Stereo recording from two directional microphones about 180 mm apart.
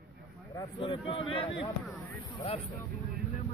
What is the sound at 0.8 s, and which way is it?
Speech, 30° left (ahead or behind).